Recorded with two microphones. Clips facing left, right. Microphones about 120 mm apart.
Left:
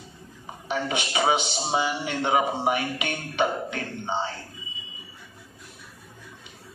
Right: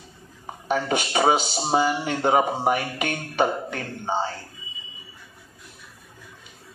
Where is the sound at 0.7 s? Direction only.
40° right (ahead or behind).